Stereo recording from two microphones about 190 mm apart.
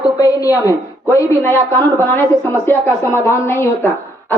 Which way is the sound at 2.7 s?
10° left (ahead or behind).